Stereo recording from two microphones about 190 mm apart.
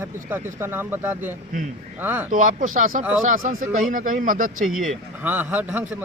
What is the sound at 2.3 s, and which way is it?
Speech, 45° right (ahead or behind).